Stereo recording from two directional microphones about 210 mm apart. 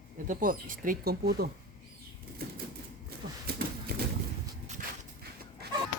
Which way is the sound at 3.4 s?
50° right (ahead or behind).